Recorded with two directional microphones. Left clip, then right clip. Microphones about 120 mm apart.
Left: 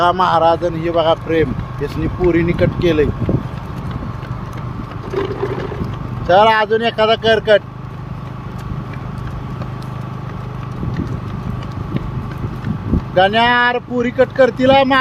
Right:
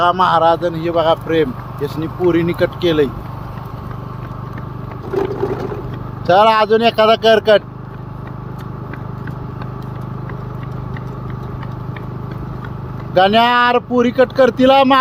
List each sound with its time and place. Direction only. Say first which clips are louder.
0.0 s speech: even; 30° left (ahead or behind)
0.4 s speech: even; 15° left (ahead or behind)
6.2 s speech: even; 40° right (ahead or behind)
13.1 s speech: right 1 dB; 50° right (ahead or behind)